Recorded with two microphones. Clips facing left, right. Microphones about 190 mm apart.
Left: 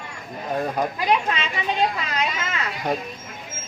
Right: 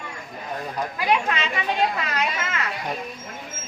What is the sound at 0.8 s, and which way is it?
Speech, 55° left (ahead or behind).